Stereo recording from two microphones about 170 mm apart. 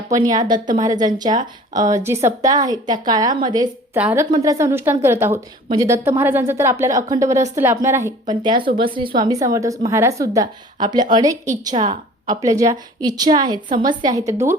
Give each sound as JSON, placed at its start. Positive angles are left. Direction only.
{"t": 0.1, "sound": "a woman's voice", "side_deg": -20}
{"t": 3.9, "sound": "a woman's voice", "side_deg": -10}
{"t": 8.4, "sound": "a woman's voice", "side_deg": -30}